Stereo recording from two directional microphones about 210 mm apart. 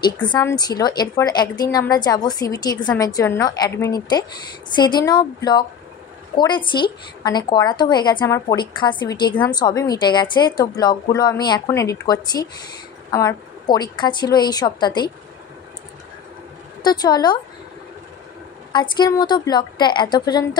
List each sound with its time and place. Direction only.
0.0 s a woman's voice: 20° left (ahead or behind)
16.8 s a woman's voice: 20° left (ahead or behind)
18.7 s a woman's voice: 20° left (ahead or behind)